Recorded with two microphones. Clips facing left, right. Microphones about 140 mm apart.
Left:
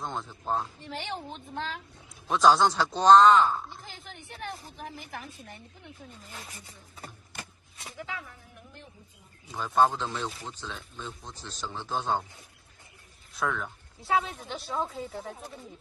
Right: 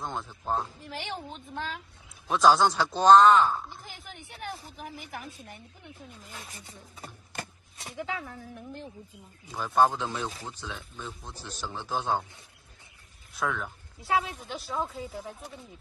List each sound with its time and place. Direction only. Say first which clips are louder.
0.0 s speech: even; centre (ahead or behind)
7.8 s speech: right 4 dB; 25° right (ahead or behind)
9.5 s speech: even; 5° right (ahead or behind)
13.4 s speech: even; centre (ahead or behind)